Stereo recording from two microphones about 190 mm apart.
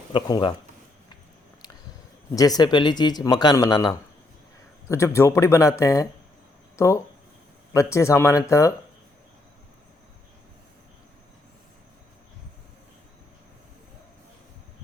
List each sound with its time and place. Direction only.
0.1 s speech: 25° left (ahead or behind)
2.3 s speech: 20° left (ahead or behind)